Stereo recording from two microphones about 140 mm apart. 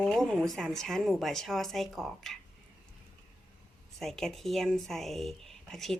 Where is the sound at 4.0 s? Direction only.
Centre (ahead or behind).